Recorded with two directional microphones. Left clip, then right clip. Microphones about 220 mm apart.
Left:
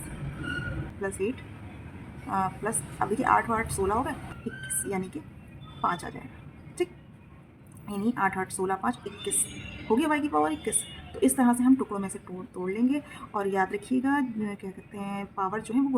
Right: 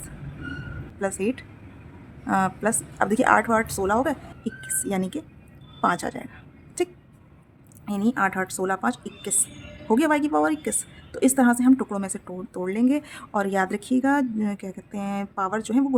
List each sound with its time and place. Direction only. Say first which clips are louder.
2.3 s a woman's voice: right 6 dB; 50° right (ahead or behind)
7.9 s a woman's voice: right 4 dB; 50° right (ahead or behind)